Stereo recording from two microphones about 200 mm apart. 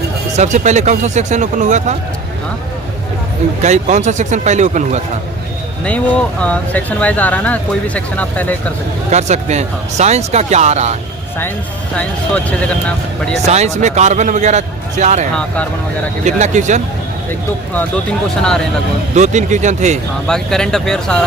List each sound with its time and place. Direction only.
0.3 s speech: 35° right (ahead or behind)
3.6 s speech: 35° right (ahead or behind)
5.8 s speech: 5° left (ahead or behind)
9.0 s speech: 35° right (ahead or behind)
11.9 s speech: 5° left (ahead or behind)
13.5 s speech: 35° right (ahead or behind)
19.1 s speech: 35° right (ahead or behind)
20.2 s speech: 5° left (ahead or behind)